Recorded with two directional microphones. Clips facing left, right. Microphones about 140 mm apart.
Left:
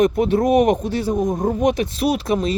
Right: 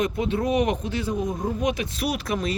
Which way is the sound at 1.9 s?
30° left (ahead or behind).